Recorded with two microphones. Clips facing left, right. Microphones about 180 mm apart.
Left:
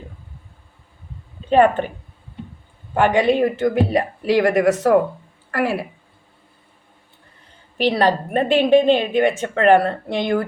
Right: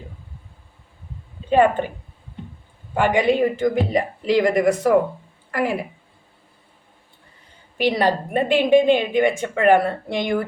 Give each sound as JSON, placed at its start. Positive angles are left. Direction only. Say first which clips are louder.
{"t": 1.5, "sound": "a woman's voice", "louder": "left 2 dB", "side_deg": -10}
{"t": 3.1, "sound": "a woman's voice", "louder": "even", "side_deg": -15}
{"t": 7.8, "sound": "a woman's voice", "louder": "left 2 dB", "side_deg": -15}